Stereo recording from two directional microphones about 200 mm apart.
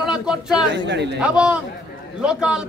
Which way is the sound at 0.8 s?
60° right (ahead or behind).